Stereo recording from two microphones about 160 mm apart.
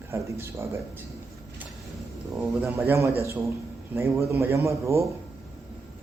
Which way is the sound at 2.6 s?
15° right (ahead or behind).